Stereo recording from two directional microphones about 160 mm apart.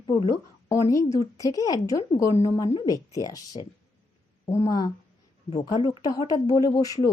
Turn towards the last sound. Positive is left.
turn(degrees=20)  # may be behind; listen again after turning